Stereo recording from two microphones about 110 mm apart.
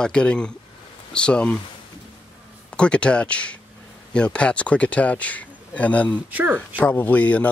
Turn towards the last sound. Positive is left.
turn(degrees=15)  # may be behind; listen again after turning